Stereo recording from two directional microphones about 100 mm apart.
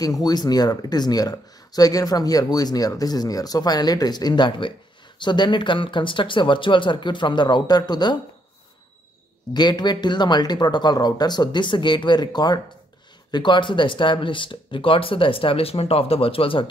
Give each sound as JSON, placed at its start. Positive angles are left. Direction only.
{"t": 0.0, "sound": "speech", "side_deg": 40}
{"t": 9.5, "sound": "speech", "side_deg": 45}